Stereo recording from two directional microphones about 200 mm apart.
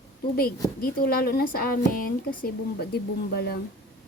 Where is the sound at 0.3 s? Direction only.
50° left (ahead or behind).